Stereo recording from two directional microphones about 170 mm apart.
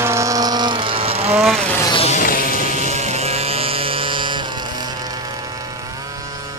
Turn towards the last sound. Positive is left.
turn(degrees=-30)  # may be behind; listen again after turning